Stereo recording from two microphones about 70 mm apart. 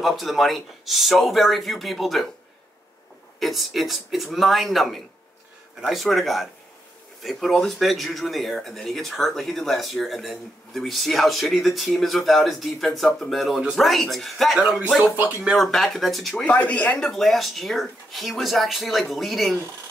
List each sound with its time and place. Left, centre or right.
0.0 s speech: centre
3.3 s speech: centre
15.1 s speech: right
15.5 s speech: centre
16.4 s speech: left
17.0 s speech: centre